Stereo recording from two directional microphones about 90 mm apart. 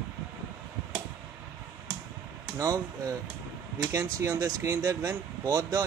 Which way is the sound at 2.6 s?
45° right (ahead or behind).